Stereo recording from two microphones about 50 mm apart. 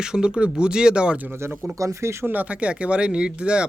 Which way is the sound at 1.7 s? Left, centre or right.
Right.